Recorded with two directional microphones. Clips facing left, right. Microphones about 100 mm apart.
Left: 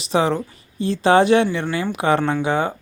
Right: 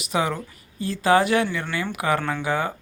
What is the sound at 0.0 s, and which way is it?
Speech, 30° left (ahead or behind).